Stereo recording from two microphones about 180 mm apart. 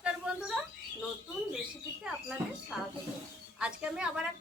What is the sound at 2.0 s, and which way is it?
A woman's voice, 5° right (ahead or behind).